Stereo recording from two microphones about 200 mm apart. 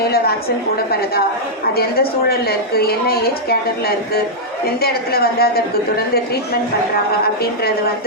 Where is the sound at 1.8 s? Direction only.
50° left (ahead or behind).